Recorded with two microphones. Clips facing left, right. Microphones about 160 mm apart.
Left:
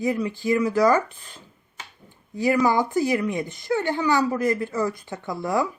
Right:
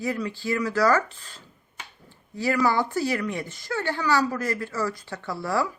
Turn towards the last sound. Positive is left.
turn(degrees=20)  # may be behind; listen again after turning